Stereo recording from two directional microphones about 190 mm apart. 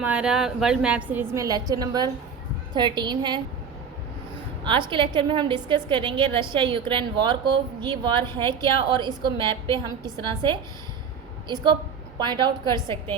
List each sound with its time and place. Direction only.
0.0 s a woman's voice: 5° right (ahead or behind); by 3.4 s 25° right (ahead or behind)
4.6 s a woman's voice: 25° right (ahead or behind)